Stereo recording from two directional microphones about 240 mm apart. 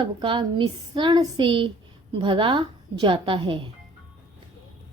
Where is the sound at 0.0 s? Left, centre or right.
Centre.